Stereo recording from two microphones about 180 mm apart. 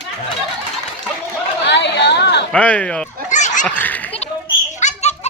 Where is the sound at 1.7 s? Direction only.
70° left (ahead or behind).